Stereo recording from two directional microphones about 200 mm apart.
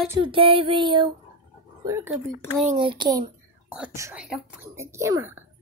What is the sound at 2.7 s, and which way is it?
A woman's voice, 25° right (ahead or behind).